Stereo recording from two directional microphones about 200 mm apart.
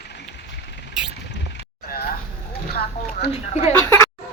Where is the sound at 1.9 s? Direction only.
50° left (ahead or behind).